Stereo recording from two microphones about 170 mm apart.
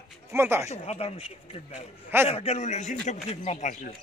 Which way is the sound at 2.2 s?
40° left (ahead or behind).